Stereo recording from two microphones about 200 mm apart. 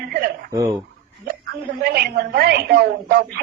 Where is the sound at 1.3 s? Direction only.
50° right (ahead or behind).